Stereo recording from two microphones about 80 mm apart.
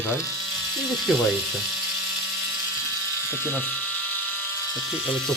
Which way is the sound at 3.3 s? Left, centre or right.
Left.